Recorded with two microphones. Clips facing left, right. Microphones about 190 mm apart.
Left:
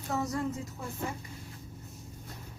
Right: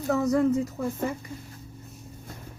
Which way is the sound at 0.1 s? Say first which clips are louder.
Right 10 dB; 60° right (ahead or behind).